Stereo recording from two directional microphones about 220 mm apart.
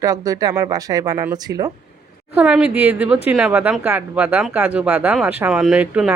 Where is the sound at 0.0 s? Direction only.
15° right (ahead or behind).